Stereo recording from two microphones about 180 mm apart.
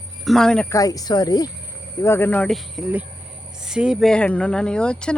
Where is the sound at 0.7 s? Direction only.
20° left (ahead or behind).